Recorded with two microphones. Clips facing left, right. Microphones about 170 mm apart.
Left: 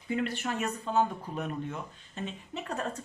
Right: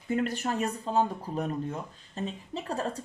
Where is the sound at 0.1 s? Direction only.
40° right (ahead or behind).